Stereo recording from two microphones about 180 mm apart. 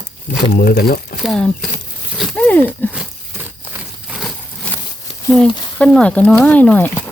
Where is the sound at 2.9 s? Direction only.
10° right (ahead or behind); by 4.8 s 5° left (ahead or behind).